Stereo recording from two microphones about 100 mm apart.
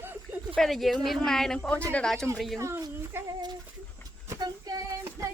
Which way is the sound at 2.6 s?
30° right (ahead or behind).